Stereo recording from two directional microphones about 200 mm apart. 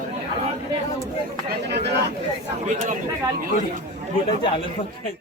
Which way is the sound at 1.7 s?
55° right (ahead or behind).